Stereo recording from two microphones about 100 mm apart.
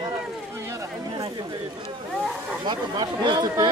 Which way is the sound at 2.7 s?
50° right (ahead or behind).